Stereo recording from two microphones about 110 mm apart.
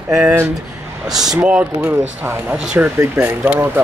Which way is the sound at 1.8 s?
20° right (ahead or behind).